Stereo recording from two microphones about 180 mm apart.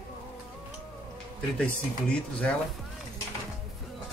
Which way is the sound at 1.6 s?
5° left (ahead or behind).